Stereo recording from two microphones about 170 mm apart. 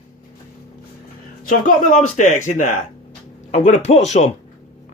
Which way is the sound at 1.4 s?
45° left (ahead or behind).